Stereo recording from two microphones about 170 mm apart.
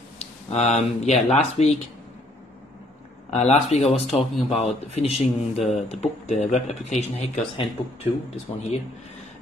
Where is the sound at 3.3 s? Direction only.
40° left (ahead or behind).